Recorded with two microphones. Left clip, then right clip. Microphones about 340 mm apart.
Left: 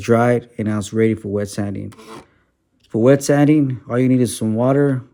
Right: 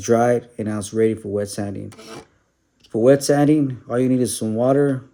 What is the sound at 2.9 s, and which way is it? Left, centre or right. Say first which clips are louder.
Speech: left 1 dB; left.